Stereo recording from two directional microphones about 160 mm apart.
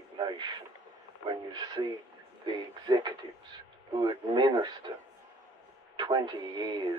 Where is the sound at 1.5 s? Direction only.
25° right (ahead or behind).